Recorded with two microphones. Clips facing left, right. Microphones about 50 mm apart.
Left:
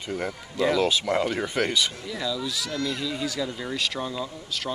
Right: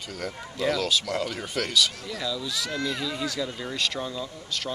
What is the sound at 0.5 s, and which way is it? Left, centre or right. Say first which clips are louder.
Speech: left 3 dB; centre.